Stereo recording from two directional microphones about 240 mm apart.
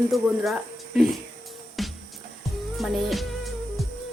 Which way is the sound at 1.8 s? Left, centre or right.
Centre.